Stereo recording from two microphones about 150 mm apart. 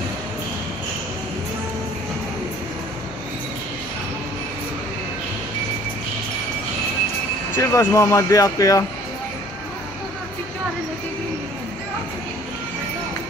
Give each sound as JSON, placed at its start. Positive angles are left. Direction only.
{"t": 7.5, "sound": "speech", "side_deg": 15}